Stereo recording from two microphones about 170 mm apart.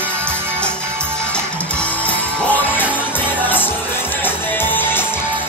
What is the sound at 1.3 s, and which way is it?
Music, 5° left (ahead or behind).